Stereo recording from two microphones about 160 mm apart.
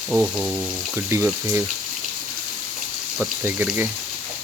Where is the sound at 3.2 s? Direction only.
15° right (ahead or behind).